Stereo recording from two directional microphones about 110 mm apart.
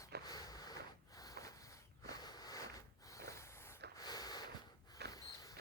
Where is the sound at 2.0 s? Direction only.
35° left (ahead or behind).